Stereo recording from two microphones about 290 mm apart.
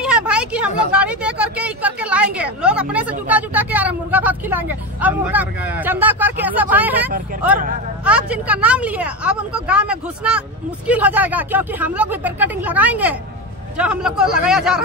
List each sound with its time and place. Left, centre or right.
0.0 s speech: centre